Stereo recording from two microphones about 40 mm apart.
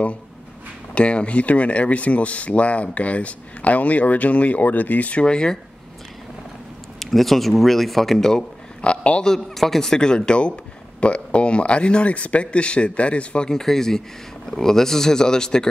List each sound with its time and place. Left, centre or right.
0.9 s speech: left
5.2 s speech: left
7.0 s speech: centre
8.8 s a man's voice: left
9.2 s speech: centre; by 13.5 s left
13.5 s speech: centre